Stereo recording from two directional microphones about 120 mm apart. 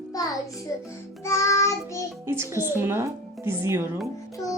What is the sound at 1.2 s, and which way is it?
Child singing, 25° left (ahead or behind).